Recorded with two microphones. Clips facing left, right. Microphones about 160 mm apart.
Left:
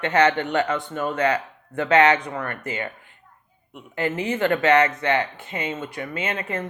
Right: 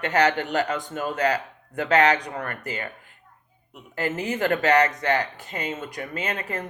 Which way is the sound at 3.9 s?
40° right (ahead or behind).